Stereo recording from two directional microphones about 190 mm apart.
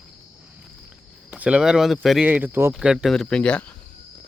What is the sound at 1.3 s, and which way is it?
Speech, 5° right (ahead or behind).